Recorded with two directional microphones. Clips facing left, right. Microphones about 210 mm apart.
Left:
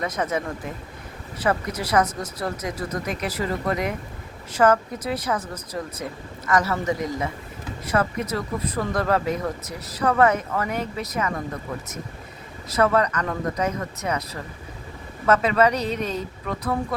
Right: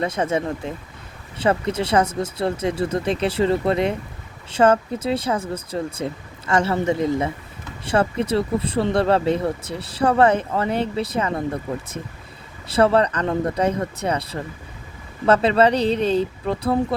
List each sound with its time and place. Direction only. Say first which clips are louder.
0.0 s speech: right 4 dB; 30° right (ahead or behind)